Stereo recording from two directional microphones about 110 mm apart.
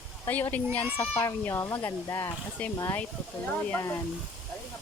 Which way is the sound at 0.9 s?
25° left (ahead or behind).